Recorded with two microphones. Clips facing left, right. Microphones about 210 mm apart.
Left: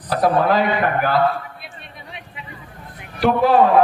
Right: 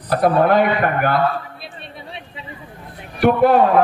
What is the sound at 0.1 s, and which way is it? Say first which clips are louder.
Speech: right 2 dB; 55° right (ahead or behind).